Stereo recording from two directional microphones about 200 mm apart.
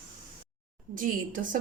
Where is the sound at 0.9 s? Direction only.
40° right (ahead or behind).